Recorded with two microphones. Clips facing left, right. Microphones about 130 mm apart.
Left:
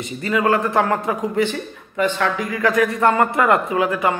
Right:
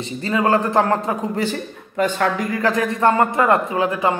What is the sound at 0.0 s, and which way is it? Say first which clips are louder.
Speech: even; 30° right (ahead or behind).